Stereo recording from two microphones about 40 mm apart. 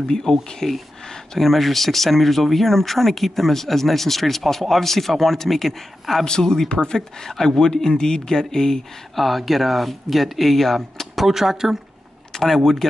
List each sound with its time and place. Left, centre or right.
0.1 s speech: centre
6.2 s speech: centre
9.1 s speech: centre
12.3 s a sound: centre